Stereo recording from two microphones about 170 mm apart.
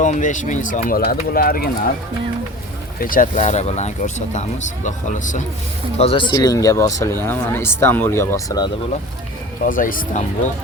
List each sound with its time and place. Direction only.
0.0 s speech: 50° left (ahead or behind)
3.0 s speech: 55° left (ahead or behind)
6.0 s speech: 35° left (ahead or behind)
6.3 s speech: 20° left (ahead or behind)
9.6 s speech: 55° left (ahead or behind)